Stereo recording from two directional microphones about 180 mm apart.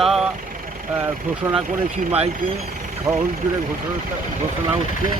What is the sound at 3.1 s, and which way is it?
Speech, 15° right (ahead or behind).